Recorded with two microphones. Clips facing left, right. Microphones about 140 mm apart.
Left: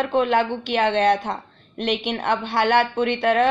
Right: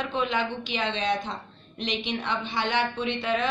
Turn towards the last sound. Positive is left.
turn(degrees=65)  # may be behind; listen again after turning